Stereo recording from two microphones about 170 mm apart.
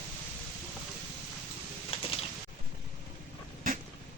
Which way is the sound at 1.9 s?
35° left (ahead or behind).